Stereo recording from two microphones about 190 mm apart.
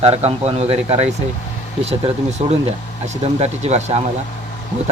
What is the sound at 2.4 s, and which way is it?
Speech, 40° right (ahead or behind).